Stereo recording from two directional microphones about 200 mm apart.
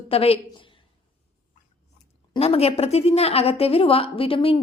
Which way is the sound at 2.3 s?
30° left (ahead or behind).